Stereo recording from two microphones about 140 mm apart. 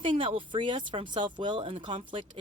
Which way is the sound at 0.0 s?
35° right (ahead or behind).